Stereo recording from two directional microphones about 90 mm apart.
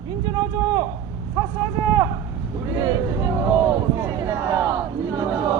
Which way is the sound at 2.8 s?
45° right (ahead or behind).